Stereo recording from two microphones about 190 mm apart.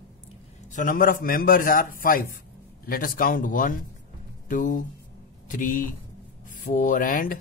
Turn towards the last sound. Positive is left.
turn(degrees=45)  # may be behind; listen again after turning